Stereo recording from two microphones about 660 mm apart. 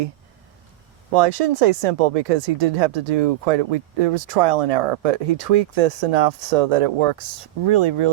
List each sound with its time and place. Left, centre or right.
1.1 s speech: right